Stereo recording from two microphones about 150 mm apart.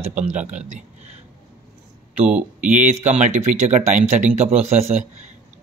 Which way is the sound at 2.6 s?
55° right (ahead or behind).